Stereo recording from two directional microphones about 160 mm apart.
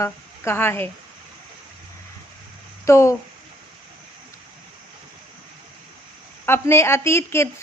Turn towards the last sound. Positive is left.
turn(degrees=15)  # may be behind; listen again after turning